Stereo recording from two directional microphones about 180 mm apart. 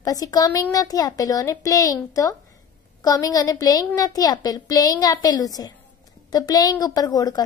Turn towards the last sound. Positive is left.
turn(degrees=20)  # may be behind; listen again after turning